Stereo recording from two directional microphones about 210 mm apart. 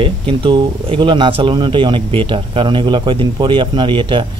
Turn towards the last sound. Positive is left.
turn(degrees=-25)  # may be behind; listen again after turning